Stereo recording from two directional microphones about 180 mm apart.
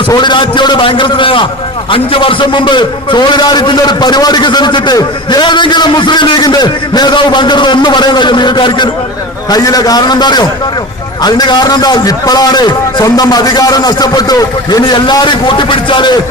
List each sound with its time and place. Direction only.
0.1 s a man's voice: 25° left (ahead or behind)